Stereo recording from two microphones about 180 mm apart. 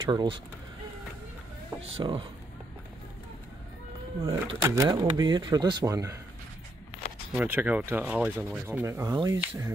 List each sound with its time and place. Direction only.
0.0 s speech: 25° right (ahead or behind)
1.8 s speech: 30° right (ahead or behind)
4.2 s speech: 20° right (ahead or behind)
7.3 s speech: 10° right (ahead or behind)